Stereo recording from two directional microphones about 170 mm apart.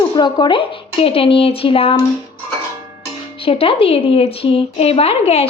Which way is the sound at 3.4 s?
35° left (ahead or behind).